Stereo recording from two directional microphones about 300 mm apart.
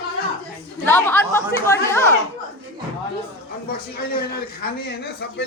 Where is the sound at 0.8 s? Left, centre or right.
Centre.